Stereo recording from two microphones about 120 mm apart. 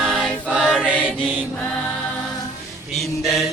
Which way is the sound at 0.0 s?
Centre (ahead or behind).